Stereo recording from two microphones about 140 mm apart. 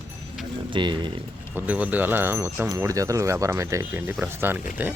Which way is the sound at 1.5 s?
10° right (ahead or behind).